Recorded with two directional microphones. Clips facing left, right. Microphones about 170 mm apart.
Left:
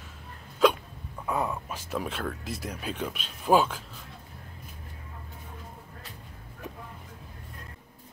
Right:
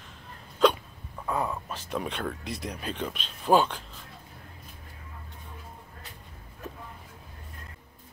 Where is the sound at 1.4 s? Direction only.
5° left (ahead or behind).